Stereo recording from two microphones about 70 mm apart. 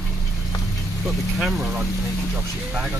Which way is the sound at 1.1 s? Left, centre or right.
Centre.